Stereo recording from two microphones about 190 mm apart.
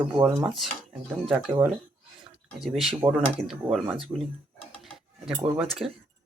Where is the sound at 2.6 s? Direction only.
Centre (ahead or behind).